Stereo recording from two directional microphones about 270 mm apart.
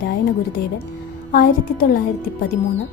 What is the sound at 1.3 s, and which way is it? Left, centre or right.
Speech, left.